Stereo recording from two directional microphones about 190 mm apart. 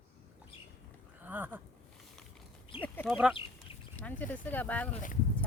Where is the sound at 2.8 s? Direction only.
10° left (ahead or behind).